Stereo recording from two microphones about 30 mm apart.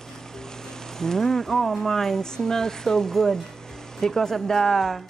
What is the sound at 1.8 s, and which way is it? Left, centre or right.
Speech, centre.